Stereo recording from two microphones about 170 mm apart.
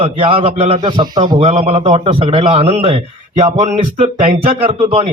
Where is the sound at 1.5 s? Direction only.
40° right (ahead or behind).